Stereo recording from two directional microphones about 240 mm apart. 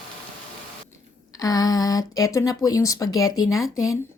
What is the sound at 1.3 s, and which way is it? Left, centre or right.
Speech, centre.